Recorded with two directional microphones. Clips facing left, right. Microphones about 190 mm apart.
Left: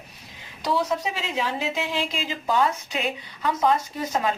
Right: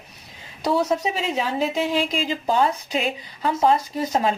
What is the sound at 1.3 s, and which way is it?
A woman's voice, 35° right (ahead or behind).